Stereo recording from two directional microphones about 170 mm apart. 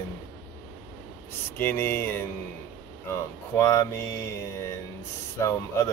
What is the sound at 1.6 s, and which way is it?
Speech, 10° left (ahead or behind).